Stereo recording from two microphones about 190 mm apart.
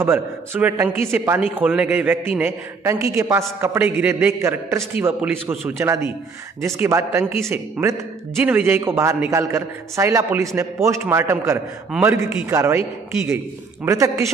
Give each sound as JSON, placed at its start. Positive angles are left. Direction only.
{"t": 0.0, "sound": "a man's voice", "side_deg": -10}
{"t": 13.8, "sound": "a man's voice", "side_deg": -15}